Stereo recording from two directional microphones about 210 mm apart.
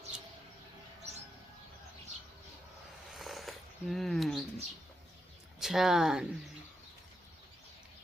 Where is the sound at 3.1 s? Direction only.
Centre (ahead or behind).